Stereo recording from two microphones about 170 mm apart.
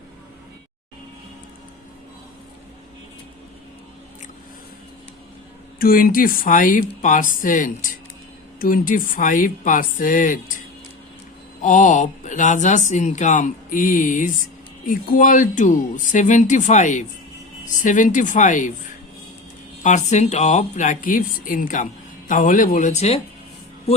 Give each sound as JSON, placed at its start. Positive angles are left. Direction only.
{"t": 5.8, "sound": "speech", "side_deg": 55}
{"t": 11.6, "sound": "speech", "side_deg": 50}
{"t": 19.8, "sound": "speech", "side_deg": 45}